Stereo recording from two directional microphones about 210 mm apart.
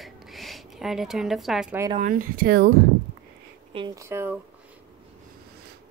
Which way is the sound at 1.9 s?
40° right (ahead or behind).